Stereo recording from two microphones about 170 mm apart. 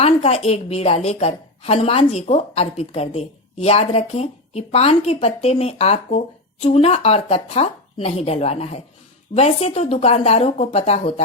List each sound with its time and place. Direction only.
0.0 s a woman's voice: 35° left (ahead or behind)